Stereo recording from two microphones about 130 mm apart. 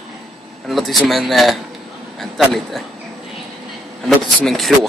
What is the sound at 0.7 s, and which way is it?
Speech, centre (ahead or behind).